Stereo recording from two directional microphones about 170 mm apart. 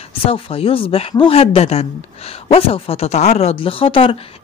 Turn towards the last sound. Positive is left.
turn(degrees=30)  # may be behind; listen again after turning